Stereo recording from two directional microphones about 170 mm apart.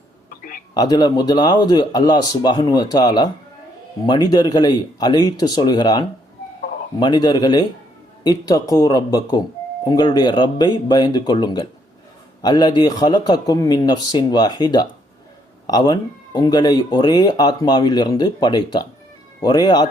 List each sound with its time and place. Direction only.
0.7 s speech: 25° left (ahead or behind)